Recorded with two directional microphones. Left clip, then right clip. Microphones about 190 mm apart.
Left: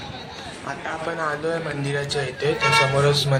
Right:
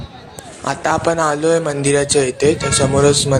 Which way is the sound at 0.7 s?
55° right (ahead or behind).